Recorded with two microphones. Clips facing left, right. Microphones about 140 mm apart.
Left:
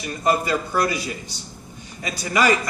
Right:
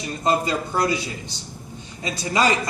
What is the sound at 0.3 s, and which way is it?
Speech, 25° right (ahead or behind).